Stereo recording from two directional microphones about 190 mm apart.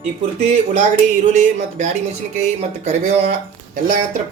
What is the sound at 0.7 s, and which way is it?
Speech, 40° right (ahead or behind).